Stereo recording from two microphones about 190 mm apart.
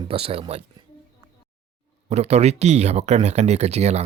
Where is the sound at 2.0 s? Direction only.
35° right (ahead or behind).